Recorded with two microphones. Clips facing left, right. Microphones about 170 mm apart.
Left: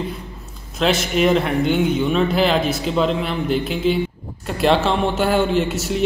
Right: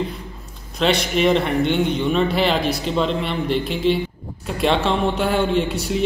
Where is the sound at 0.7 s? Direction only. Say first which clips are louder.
Left 1 dB; centre (ahead or behind).